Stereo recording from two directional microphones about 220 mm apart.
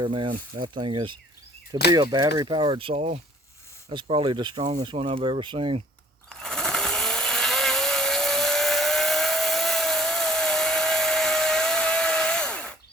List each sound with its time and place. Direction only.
0.0 s speech: 20° right (ahead or behind)
6.4 s vehicle: centre (ahead or behind)